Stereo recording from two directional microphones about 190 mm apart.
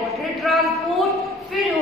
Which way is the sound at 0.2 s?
Centre (ahead or behind).